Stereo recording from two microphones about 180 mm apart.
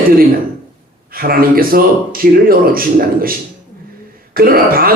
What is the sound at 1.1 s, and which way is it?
Speech, 55° right (ahead or behind).